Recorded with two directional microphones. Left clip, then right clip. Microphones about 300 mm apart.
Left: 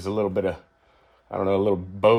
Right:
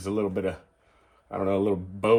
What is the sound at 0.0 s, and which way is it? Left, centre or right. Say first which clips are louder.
Speech: left 4 dB; left.